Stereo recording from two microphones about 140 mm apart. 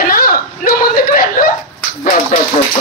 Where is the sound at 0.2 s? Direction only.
90° left.